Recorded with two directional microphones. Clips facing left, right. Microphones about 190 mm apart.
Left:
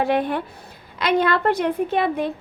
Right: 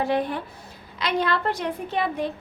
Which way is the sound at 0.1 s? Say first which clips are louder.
Left 3 dB; 65° left (ahead or behind).